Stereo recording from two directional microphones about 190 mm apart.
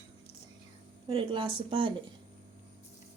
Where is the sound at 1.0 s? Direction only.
25° right (ahead or behind).